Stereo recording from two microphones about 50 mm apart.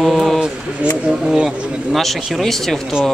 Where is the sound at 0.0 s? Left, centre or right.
Centre.